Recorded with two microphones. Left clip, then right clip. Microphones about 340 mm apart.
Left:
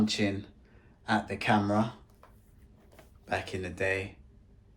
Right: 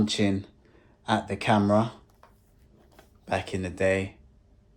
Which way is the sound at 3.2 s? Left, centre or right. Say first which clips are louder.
Right 4 dB; centre.